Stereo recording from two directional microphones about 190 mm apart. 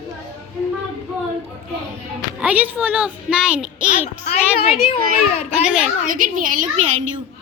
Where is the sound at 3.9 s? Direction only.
35° left (ahead or behind).